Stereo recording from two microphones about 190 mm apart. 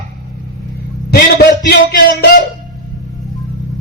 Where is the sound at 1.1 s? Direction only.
60° left (ahead or behind).